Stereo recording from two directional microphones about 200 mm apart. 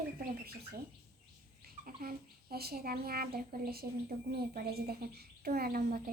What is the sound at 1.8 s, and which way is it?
A woman's voice, 50° right (ahead or behind).